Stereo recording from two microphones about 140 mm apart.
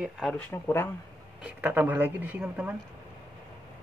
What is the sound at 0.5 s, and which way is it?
Speech, 15° left (ahead or behind).